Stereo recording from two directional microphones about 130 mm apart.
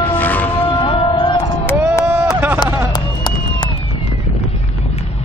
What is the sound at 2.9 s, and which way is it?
Run, 30° left (ahead or behind).